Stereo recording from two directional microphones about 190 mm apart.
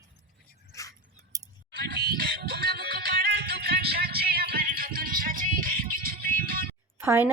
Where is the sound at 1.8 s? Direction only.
55° right (ahead or behind).